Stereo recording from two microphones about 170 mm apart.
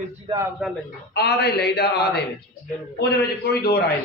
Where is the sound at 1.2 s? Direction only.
70° left (ahead or behind).